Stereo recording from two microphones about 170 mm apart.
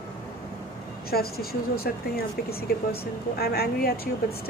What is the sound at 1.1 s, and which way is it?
Speech, 65° left (ahead or behind).